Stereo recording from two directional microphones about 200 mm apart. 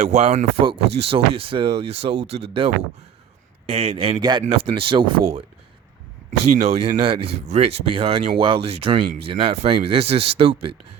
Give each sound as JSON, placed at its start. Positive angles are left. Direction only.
{"t": 0.0, "sound": "speech", "side_deg": -30}
{"t": 6.6, "sound": "speech", "side_deg": -30}